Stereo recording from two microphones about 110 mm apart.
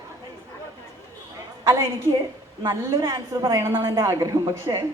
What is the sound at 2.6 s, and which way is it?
A woman's voice, 30° right (ahead or behind).